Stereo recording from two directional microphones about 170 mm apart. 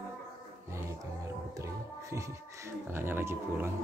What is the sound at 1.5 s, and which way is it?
Music, 15° right (ahead or behind).